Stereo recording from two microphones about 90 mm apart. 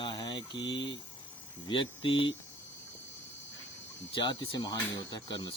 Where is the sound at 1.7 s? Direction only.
85° left.